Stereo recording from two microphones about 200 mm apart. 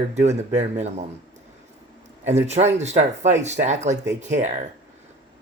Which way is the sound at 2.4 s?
35° right (ahead or behind).